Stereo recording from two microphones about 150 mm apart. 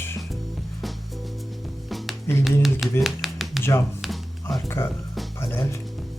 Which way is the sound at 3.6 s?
15° left (ahead or behind).